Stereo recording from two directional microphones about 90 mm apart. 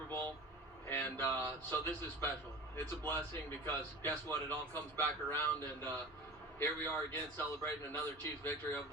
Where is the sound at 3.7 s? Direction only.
25° left (ahead or behind).